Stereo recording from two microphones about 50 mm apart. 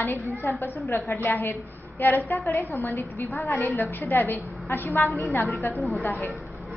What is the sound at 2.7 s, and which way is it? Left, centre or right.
A woman's voice, left.